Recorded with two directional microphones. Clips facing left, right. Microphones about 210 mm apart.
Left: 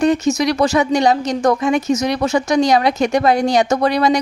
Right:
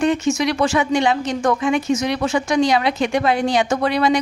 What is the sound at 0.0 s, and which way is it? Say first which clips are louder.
Speech: left 3 dB; 40° left (ahead or behind).